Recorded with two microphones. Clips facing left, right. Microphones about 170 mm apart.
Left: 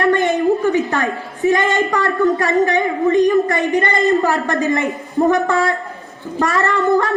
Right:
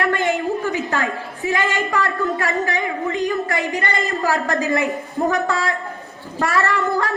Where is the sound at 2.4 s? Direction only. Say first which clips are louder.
Left 6 dB; 20° left (ahead or behind).